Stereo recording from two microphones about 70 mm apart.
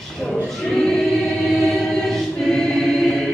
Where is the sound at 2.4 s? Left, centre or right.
Centre.